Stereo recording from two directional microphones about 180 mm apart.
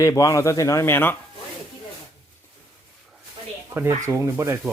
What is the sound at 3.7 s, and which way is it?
Speech, 15° right (ahead or behind).